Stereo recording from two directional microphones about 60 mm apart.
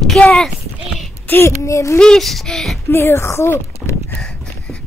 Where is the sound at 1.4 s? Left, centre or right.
Left.